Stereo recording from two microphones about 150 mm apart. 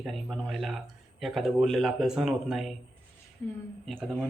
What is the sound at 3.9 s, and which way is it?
Speech, 10° right (ahead or behind).